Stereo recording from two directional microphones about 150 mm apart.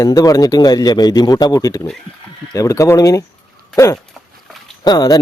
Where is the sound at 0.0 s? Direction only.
25° left (ahead or behind).